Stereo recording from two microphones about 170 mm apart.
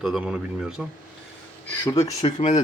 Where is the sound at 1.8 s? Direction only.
25° left (ahead or behind).